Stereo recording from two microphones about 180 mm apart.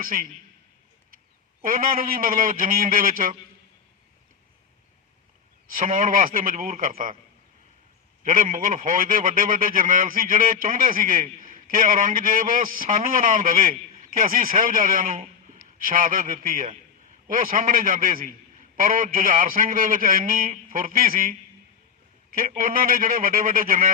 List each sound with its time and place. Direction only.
0.0 s a man's voice: 50° right (ahead or behind)
1.6 s a man's voice: 50° right (ahead or behind)
5.6 s a man's voice: 50° right (ahead or behind)
8.2 s a man's voice: 50° right (ahead or behind)